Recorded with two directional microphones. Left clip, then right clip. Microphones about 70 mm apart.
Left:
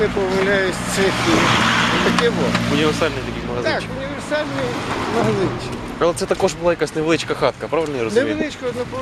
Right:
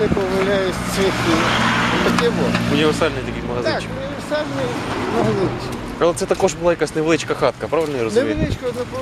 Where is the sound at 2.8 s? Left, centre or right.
Centre.